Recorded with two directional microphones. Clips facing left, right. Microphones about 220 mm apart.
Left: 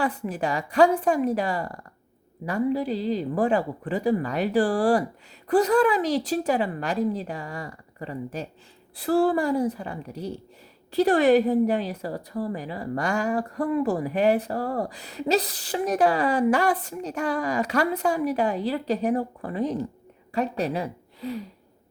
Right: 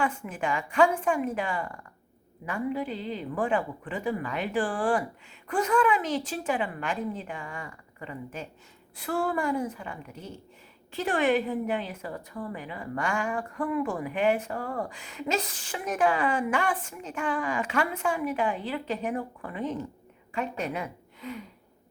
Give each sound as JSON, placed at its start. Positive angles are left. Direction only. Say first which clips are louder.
{"t": 0.0, "sound": "a woman's voice", "louder": "left 3 dB", "side_deg": 35}